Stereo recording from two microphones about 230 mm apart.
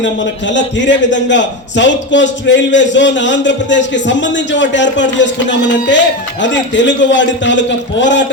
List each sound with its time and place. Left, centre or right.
0.0 s a man's voice: left